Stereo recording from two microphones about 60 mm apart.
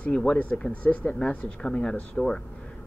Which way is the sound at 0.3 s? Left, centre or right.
Left.